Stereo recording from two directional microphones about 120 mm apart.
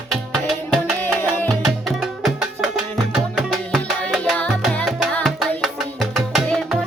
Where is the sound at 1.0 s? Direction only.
15° left (ahead or behind).